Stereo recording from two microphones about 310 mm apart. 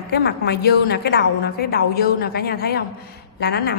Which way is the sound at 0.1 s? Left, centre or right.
Left.